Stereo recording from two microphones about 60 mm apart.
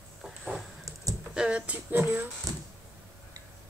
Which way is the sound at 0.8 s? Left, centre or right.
Right.